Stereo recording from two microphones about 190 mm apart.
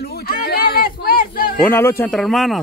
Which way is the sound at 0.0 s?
55° left (ahead or behind).